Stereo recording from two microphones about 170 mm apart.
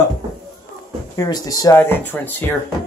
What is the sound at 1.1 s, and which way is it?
Speech, 20° left (ahead or behind).